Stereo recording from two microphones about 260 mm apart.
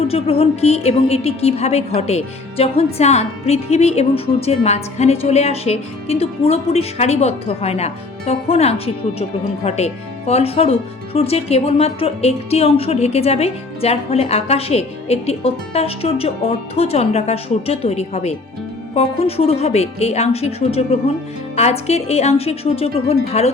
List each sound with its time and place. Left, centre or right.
0.1 s a woman's voice: left